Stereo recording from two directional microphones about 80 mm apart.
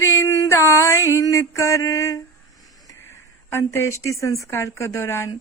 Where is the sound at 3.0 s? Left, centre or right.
Left.